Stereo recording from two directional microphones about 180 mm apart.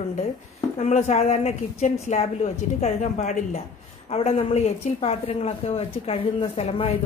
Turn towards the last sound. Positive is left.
turn(degrees=30)  # may be behind; listen again after turning